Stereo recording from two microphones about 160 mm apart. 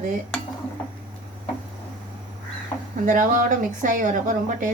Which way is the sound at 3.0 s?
55° right (ahead or behind).